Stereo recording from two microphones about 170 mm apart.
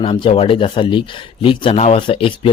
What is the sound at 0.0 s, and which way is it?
Speech, 30° left (ahead or behind).